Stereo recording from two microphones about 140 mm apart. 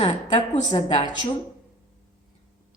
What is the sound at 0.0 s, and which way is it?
Speech, 35° left (ahead or behind).